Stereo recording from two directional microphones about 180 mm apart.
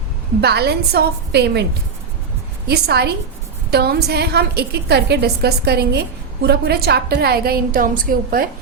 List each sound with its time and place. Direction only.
0.4 s a woman's voice: 65° right (ahead or behind)
2.6 s a woman's voice: 65° right (ahead or behind)